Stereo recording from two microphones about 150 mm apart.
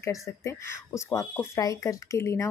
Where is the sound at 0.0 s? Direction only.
20° left (ahead or behind).